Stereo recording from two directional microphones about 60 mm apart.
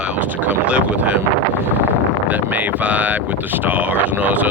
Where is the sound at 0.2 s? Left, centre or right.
Right.